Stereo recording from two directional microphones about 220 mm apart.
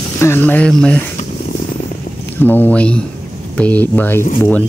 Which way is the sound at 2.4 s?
10° left (ahead or behind).